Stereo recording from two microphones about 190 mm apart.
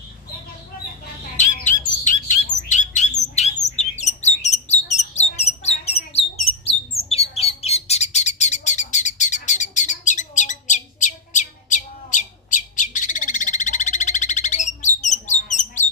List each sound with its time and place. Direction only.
2.0 s bird: 40° left (ahead or behind)